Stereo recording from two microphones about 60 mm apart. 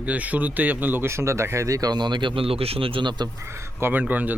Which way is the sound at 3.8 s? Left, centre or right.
Right.